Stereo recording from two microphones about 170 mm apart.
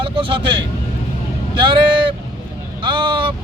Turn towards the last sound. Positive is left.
turn(degrees=-30)  # may be behind; listen again after turning